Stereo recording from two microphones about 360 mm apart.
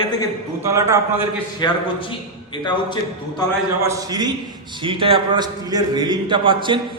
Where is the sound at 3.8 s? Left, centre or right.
Centre.